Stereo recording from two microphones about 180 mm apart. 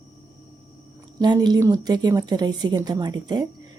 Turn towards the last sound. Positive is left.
turn(degrees=-25)  # may be behind; listen again after turning